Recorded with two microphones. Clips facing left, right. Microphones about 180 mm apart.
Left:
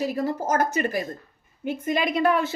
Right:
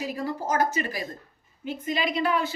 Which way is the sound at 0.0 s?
40° left (ahead or behind).